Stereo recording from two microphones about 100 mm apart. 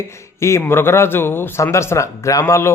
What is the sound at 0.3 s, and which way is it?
A man's voice, 30° left (ahead or behind).